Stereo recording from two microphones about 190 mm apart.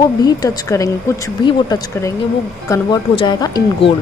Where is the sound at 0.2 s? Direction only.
20° left (ahead or behind).